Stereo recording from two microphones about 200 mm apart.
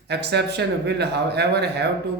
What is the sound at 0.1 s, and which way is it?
Speech, 55° right (ahead or behind).